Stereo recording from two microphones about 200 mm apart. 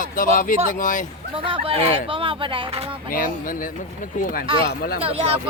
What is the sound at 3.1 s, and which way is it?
Speech, 45° left (ahead or behind).